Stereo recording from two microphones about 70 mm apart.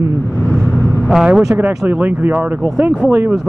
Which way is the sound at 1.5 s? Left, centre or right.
Right.